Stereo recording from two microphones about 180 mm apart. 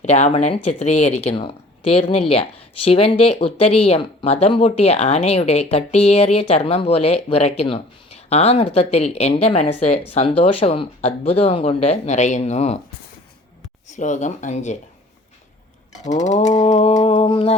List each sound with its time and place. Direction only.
0.0 s speech: 40° left (ahead or behind)
13.9 s speech: 40° left (ahead or behind)
16.0 s speech: 40° left (ahead or behind)